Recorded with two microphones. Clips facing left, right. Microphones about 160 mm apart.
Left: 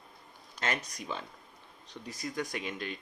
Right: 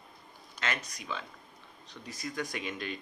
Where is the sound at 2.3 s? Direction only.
30° left (ahead or behind).